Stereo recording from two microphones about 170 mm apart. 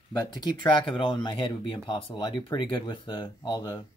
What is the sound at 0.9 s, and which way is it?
Speech, 30° left (ahead or behind).